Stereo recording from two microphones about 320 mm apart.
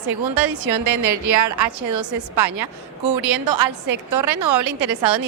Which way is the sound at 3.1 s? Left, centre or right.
Right.